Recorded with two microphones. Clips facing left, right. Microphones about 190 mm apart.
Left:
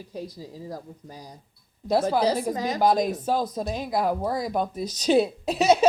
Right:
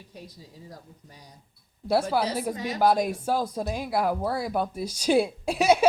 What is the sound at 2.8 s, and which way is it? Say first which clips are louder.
Speech: even; 10° right (ahead or behind).